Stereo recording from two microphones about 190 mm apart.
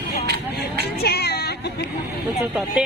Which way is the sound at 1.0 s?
60° left (ahead or behind).